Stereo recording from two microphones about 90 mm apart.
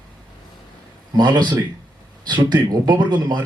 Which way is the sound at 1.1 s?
55° right (ahead or behind).